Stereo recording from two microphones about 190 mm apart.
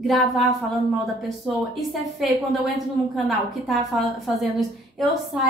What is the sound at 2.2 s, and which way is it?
Speech, centre (ahead or behind).